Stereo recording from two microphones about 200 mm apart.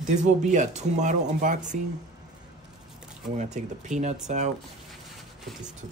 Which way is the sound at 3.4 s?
35° right (ahead or behind).